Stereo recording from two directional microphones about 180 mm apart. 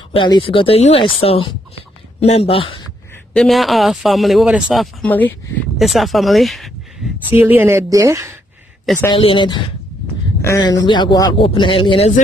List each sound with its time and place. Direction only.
0.1 s speech: 30° left (ahead or behind)
3.3 s speech: centre (ahead or behind)
5.0 s speech: 10° left (ahead or behind)
7.2 s speech: 10° right (ahead or behind)
9.1 s speech: 30° left (ahead or behind)